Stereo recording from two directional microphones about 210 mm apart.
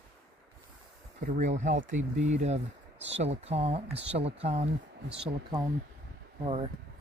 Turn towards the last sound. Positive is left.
turn(degrees=-25)  # may be behind; listen again after turning